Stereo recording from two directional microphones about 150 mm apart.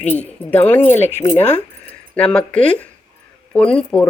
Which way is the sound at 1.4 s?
45° left (ahead or behind).